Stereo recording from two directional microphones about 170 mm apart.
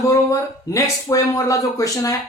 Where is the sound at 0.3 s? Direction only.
20° left (ahead or behind).